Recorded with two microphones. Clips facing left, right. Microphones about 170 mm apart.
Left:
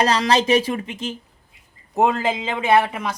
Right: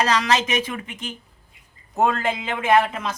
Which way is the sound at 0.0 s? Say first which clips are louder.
Left 3 dB; 35° left (ahead or behind).